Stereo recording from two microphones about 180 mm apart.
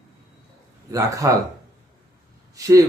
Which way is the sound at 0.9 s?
20° right (ahead or behind).